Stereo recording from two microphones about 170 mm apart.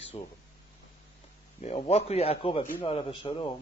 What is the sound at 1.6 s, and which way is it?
Speech, 40° left (ahead or behind).